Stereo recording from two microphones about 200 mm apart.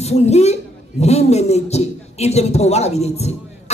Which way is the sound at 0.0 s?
35° left (ahead or behind).